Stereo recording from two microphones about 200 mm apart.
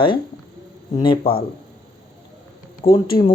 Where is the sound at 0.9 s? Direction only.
25° left (ahead or behind).